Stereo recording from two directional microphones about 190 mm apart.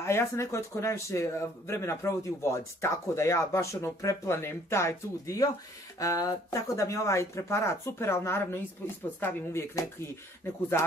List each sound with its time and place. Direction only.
0.0 s speech: 15° left (ahead or behind)